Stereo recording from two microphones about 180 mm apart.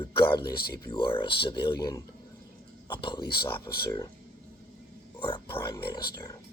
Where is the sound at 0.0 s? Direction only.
30° left (ahead or behind).